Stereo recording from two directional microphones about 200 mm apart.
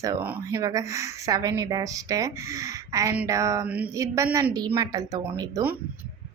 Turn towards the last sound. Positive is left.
turn(degrees=-15)  # may be behind; listen again after turning